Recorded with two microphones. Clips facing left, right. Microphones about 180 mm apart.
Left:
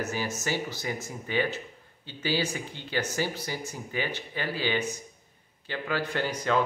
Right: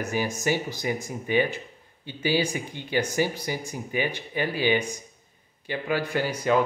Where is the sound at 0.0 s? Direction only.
15° right (ahead or behind).